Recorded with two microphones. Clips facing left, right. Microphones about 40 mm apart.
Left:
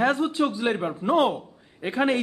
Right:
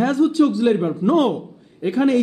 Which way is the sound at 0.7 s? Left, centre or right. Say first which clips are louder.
Right 6 dB; centre.